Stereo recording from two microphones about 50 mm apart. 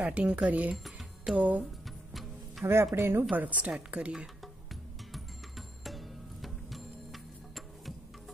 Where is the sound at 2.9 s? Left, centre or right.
Right.